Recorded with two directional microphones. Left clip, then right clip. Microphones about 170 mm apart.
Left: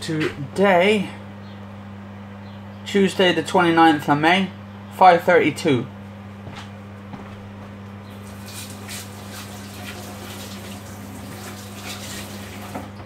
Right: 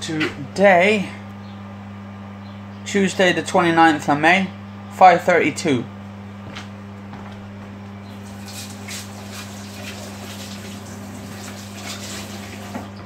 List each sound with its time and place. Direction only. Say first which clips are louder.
0.6 s speech: right 3 dB; 15° right (ahead or behind)
2.9 s speech: even; 15° right (ahead or behind)